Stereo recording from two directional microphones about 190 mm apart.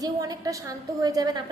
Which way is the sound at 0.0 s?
20° right (ahead or behind).